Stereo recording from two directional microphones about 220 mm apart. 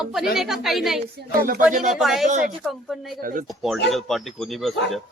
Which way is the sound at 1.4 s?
40° right (ahead or behind).